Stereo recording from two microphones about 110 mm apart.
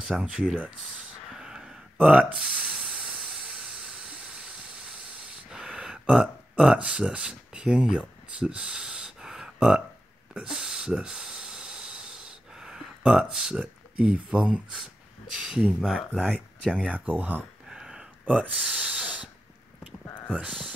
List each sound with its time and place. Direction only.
0.1 s speech: 5° right (ahead or behind)
1.4 s a sound: 5° right (ahead or behind)
2.9 s hiss: 10° right (ahead or behind)
5.5 s a sound: 5° right (ahead or behind)
10.3 s snort: 5° right (ahead or behind)
13.3 s speech: 5° right (ahead or behind)
16.7 s speech: 10° right (ahead or behind)
17.6 s snort: 5° right (ahead or behind)